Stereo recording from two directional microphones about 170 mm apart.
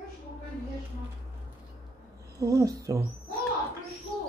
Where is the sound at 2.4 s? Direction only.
20° right (ahead or behind).